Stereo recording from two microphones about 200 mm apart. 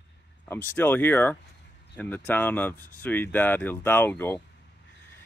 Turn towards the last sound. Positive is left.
turn(degrees=10)  # may be behind; listen again after turning